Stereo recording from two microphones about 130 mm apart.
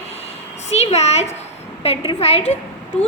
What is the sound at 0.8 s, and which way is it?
A child's voice, 55° left (ahead or behind).